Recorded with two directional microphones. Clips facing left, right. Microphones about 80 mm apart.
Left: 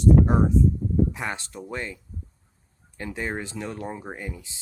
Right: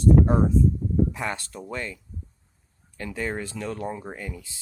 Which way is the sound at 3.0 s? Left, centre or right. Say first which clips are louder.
Right 1 dB; left.